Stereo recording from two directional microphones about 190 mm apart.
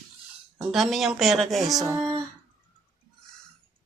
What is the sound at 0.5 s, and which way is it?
A woman's voice, centre (ahead or behind).